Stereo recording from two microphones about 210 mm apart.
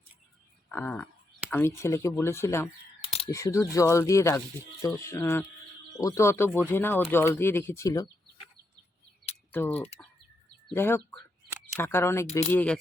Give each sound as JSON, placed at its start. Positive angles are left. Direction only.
{"t": 0.7, "sound": "speech", "side_deg": 5}
{"t": 9.5, "sound": "speech", "side_deg": 10}